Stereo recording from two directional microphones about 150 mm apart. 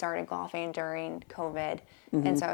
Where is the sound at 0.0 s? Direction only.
20° left (ahead or behind).